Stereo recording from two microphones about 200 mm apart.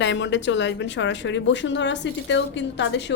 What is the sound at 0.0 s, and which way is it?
A woman's voice, 65° left (ahead or behind).